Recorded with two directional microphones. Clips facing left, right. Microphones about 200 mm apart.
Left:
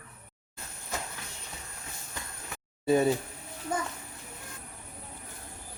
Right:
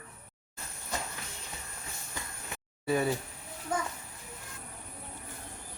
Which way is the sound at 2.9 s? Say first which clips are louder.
Left 5 dB; 20° left (ahead or behind).